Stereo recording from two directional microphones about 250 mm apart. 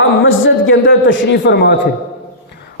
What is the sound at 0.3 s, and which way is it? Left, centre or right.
A man's voice, left.